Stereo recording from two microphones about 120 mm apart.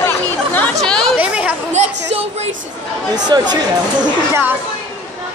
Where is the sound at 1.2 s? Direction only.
10° right (ahead or behind).